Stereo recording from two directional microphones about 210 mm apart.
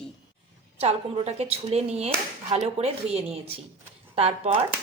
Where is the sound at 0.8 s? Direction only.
30° right (ahead or behind).